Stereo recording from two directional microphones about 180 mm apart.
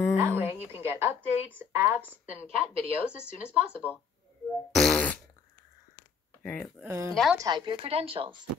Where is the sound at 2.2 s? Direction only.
35° right (ahead or behind).